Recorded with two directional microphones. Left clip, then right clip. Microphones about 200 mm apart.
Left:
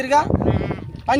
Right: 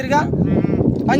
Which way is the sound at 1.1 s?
10° right (ahead or behind).